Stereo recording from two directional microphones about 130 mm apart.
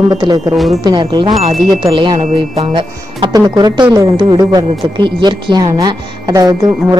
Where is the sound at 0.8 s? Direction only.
35° right (ahead or behind).